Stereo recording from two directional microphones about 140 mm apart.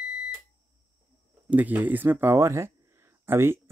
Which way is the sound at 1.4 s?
10° right (ahead or behind).